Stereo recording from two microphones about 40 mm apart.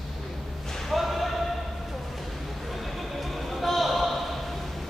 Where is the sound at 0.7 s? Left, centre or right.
Centre.